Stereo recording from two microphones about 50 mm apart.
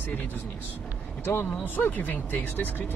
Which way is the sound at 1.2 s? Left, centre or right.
Left.